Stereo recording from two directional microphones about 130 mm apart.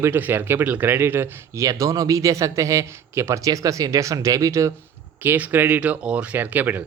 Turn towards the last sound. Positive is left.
turn(degrees=-15)  # may be behind; listen again after turning